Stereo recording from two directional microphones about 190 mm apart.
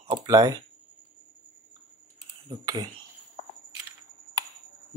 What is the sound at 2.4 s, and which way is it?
Speech, 20° right (ahead or behind).